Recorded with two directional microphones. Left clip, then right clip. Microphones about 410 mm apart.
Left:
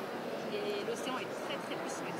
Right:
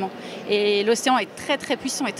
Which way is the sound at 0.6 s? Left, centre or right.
Right.